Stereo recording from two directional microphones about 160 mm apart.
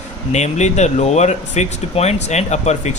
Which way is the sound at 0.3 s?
45° left (ahead or behind).